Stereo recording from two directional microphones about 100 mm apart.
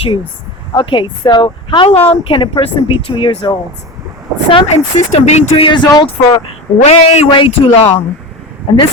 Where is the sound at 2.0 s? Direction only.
70° left (ahead or behind).